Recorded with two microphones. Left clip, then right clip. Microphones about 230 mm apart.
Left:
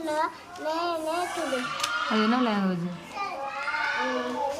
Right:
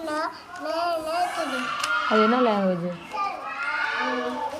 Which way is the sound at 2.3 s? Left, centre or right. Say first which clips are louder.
Right 5 dB; centre.